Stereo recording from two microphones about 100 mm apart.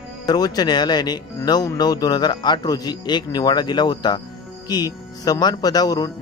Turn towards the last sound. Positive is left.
turn(degrees=40)  # may be behind; listen again after turning